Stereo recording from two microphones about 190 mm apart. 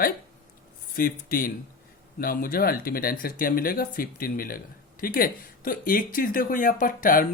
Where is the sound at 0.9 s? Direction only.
50° left (ahead or behind).